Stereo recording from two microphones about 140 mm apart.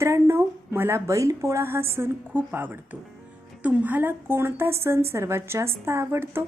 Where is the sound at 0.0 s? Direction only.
20° right (ahead or behind).